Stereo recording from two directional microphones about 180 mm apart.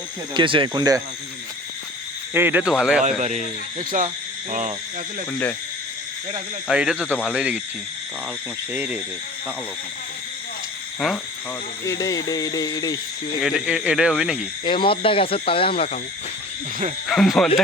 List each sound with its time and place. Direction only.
0.3 s speech: 30° right (ahead or behind)
2.3 s speech: 10° right (ahead or behind)
3.2 s speech: 40° right (ahead or behind)
5.3 s speech: 10° left (ahead or behind)
6.7 s speech: 5° right (ahead or behind)
7.1 s speech: 10° left (ahead or behind)
7.3 s speech: 5° right (ahead or behind)
8.7 s speech: 10° right (ahead or behind)
11.9 s speech: 20° left (ahead or behind)
13.4 s speech: centre (ahead or behind)
14.6 s speech: 25° left (ahead or behind)
17.1 s speech: centre (ahead or behind)